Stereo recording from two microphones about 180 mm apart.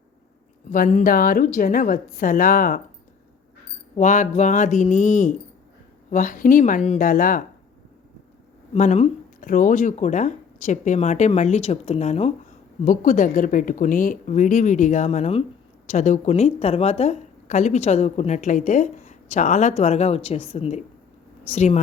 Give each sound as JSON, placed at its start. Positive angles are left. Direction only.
{"t": 0.7, "sound": "a woman's voice", "side_deg": 45}
{"t": 3.9, "sound": "a woman's voice", "side_deg": 45}
{"t": 8.7, "sound": "a woman's voice", "side_deg": 40}